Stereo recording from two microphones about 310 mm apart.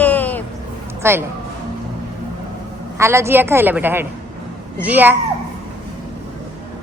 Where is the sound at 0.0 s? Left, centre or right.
Centre.